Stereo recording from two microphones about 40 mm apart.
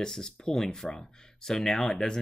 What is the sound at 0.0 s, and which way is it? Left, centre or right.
Speech, centre.